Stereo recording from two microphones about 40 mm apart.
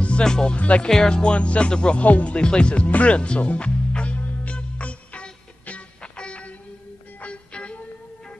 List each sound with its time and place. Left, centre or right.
0.2 s speech: centre
0.6 s speech: left
0.8 s speech: centre
2.0 s speech: left
2.3 s speech: left
4.5 s music: left